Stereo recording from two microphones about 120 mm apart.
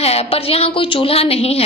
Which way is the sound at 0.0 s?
60° left (ahead or behind).